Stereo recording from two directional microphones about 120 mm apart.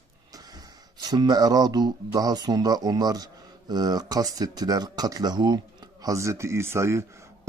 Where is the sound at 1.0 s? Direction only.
35° right (ahead or behind).